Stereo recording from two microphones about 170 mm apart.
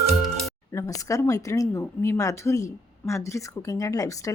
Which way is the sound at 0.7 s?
20° left (ahead or behind).